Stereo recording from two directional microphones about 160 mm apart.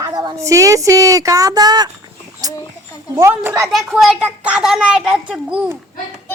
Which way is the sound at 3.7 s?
Centre (ahead or behind).